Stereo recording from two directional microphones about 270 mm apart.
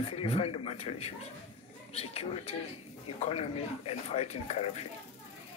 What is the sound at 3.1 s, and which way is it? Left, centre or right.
Speech, left.